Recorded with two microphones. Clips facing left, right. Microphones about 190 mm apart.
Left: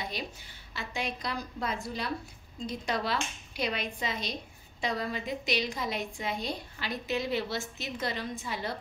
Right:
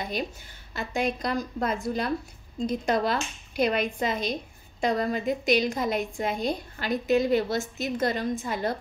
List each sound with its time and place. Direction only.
0.7 s speech: 50° right (ahead or behind)